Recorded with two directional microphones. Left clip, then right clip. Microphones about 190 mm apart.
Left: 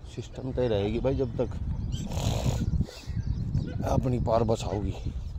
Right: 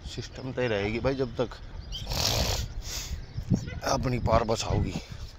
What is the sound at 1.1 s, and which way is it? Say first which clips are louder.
Speech: even; 25° left (ahead or behind).